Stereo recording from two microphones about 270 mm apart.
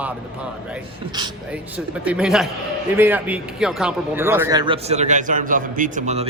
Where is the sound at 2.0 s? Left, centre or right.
Centre.